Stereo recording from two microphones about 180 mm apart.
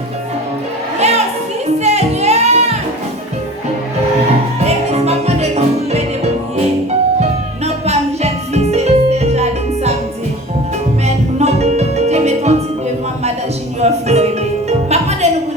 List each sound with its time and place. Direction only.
0.9 s music: 35° right (ahead or behind)
4.6 s music: 35° right (ahead or behind)
11.0 s music: 35° right (ahead or behind)
13.8 s music: 35° right (ahead or behind)